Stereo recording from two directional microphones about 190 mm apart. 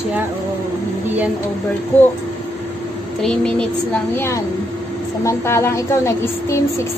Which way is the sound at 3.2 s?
5° left (ahead or behind).